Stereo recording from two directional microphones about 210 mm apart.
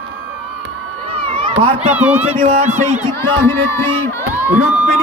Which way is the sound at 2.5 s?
35° right (ahead or behind).